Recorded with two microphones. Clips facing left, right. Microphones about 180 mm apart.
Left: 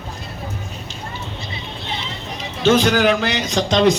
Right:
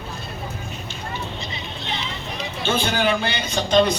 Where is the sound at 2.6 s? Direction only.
90° left.